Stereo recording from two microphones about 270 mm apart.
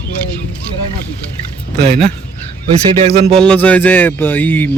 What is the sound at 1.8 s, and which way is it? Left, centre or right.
Speech, right.